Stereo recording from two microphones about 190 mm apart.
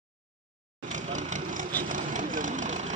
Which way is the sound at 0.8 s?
40° right (ahead or behind).